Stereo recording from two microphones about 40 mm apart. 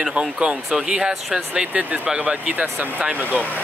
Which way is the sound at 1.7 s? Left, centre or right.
Right.